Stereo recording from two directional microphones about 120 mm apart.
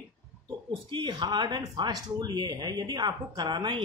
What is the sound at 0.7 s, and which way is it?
Speech, 40° right (ahead or behind).